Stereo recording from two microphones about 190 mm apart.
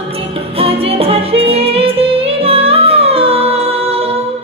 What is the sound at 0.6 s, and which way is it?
Music, 30° right (ahead or behind).